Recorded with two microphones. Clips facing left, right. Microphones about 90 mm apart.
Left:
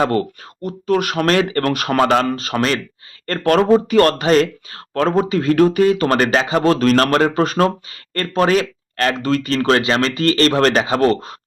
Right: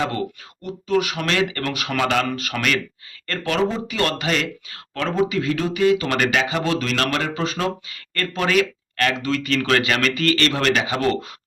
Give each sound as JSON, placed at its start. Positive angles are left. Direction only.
{"t": 0.0, "sound": "speech", "side_deg": 45}
{"t": 3.4, "sound": "speech", "side_deg": 50}